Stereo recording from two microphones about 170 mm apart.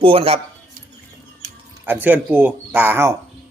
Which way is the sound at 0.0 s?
35° right (ahead or behind).